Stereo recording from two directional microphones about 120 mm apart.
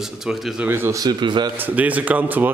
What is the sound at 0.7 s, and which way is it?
Speech, 20° right (ahead or behind).